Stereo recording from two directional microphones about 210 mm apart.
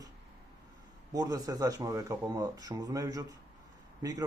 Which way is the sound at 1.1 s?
15° right (ahead or behind).